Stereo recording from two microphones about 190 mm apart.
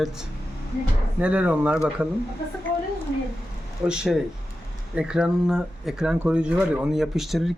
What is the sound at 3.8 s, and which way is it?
Speech, 5° right (ahead or behind).